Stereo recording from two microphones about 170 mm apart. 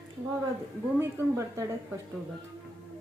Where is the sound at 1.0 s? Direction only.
15° right (ahead or behind).